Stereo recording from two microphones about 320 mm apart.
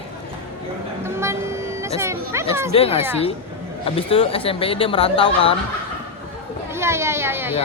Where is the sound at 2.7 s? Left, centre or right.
Centre.